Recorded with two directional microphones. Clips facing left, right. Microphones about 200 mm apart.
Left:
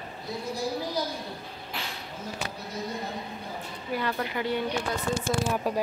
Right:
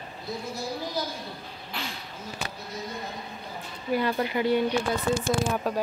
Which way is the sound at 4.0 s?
15° right (ahead or behind).